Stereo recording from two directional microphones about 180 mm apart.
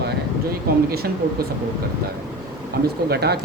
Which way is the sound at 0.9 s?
55° right (ahead or behind).